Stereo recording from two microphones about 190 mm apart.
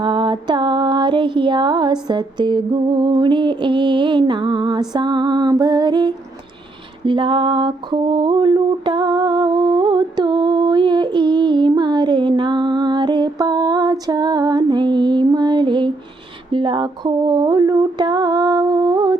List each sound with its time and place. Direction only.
0.0 s music: 25° right (ahead or behind)
7.0 s mantra: 25° right (ahead or behind)
16.5 s music: 25° right (ahead or behind)